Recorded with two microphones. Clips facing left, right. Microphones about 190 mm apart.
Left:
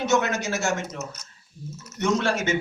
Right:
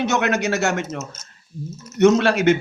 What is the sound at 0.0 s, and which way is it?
Speech, 65° right (ahead or behind).